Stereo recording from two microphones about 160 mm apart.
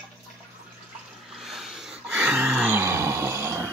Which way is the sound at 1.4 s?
Centre (ahead or behind).